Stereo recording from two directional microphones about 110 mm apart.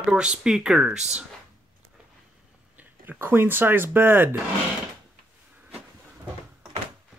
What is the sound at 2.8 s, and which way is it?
Speech, 20° right (ahead or behind).